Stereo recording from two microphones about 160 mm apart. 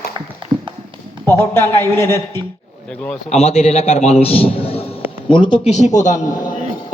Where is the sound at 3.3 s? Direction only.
40° left (ahead or behind).